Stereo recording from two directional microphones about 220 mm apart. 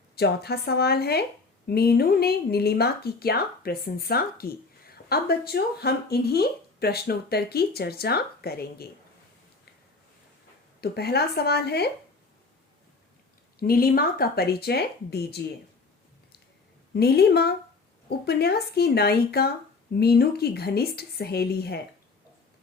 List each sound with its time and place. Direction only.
0.2 s speech: 45° left (ahead or behind)
10.8 s speech: 45° left (ahead or behind)
13.6 s speech: 40° left (ahead or behind)
16.9 s speech: 45° left (ahead or behind)